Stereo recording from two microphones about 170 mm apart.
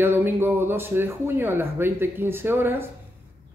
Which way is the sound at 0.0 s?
10° right (ahead or behind).